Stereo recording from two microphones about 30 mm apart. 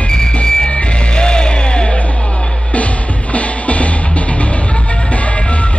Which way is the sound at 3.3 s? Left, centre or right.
Left.